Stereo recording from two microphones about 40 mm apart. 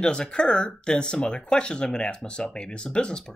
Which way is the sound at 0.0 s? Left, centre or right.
Left.